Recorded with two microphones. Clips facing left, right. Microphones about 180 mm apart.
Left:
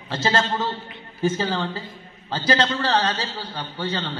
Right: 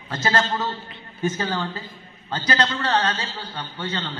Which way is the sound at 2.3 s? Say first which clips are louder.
Left 2 dB; 30° left (ahead or behind).